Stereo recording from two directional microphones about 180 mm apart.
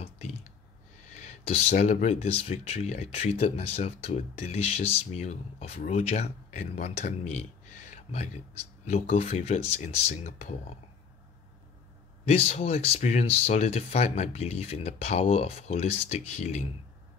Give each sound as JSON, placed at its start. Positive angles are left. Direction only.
{"t": 0.0, "sound": "clicking", "side_deg": 35}
{"t": 1.1, "sound": "speech", "side_deg": 35}
{"t": 12.3, "sound": "speech", "side_deg": 35}